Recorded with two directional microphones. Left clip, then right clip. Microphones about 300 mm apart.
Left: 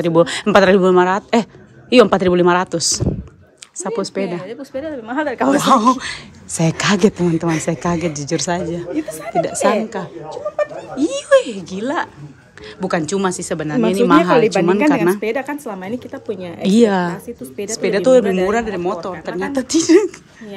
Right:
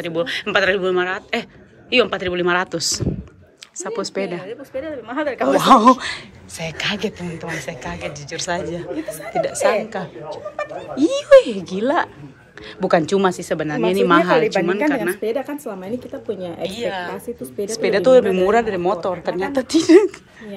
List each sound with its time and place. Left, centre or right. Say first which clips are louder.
0.0 s speech: left 8 dB; left
4.5 s speech: left 2 dB; left
5.6 s speech: right 4 dB; centre
6.5 s speech: left 6 dB; left; by 10.1 s centre
10.3 s speech: left 8 dB; left
11.0 s speech: right 3 dB; centre
16.6 s speech: left 11 dB; left
17.6 s speech: left 1 dB; centre